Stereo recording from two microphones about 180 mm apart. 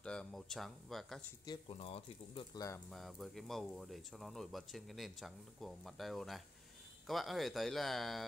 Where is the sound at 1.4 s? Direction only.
25° left (ahead or behind).